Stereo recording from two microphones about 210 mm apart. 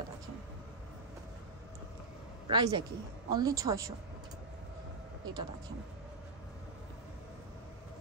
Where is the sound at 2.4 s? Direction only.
25° right (ahead or behind).